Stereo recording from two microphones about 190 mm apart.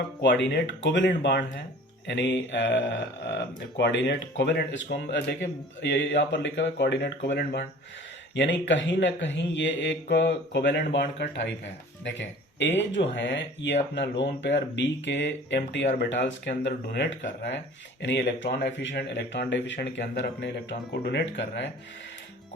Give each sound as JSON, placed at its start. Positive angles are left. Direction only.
{"t": 0.4, "sound": "speech", "side_deg": 70}